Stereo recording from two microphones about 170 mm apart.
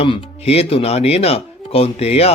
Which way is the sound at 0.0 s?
35° left (ahead or behind).